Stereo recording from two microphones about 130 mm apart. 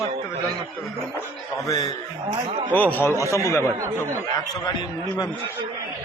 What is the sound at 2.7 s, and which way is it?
Speech, 15° left (ahead or behind).